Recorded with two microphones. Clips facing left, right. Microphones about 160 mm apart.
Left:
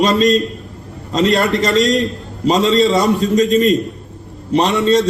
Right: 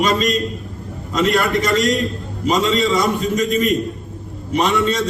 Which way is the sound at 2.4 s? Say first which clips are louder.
Left 4 dB; 35° left (ahead or behind).